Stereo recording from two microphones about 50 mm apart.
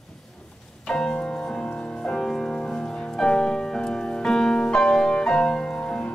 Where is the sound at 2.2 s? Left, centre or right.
Centre.